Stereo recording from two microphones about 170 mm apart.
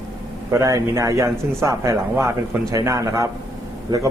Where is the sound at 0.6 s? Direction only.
20° right (ahead or behind).